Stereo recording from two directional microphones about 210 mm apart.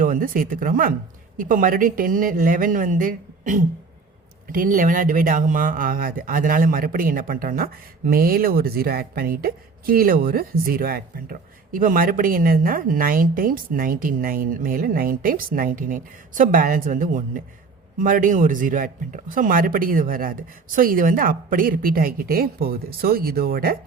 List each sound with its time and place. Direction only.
0.0 s a woman's voice: 40° right (ahead or behind)